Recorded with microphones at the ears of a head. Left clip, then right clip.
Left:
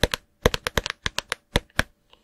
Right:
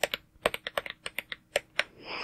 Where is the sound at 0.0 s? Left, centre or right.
Left.